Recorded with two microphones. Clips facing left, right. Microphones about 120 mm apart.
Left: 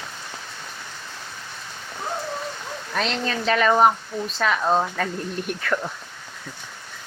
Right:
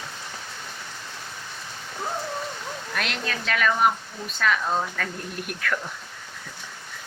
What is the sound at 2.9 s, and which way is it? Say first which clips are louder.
Speech: left 6 dB; 30° left (ahead or behind).